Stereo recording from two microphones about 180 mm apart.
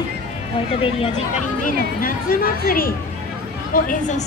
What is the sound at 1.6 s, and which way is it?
Speech, 50° left (ahead or behind).